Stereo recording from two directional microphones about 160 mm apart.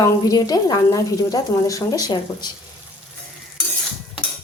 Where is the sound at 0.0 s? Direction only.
25° left (ahead or behind).